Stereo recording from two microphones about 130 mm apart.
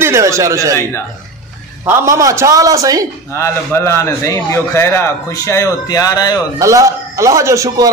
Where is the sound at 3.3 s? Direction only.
20° left (ahead or behind).